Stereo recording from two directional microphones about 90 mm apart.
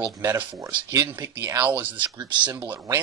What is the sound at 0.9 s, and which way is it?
Speech, 40° right (ahead or behind).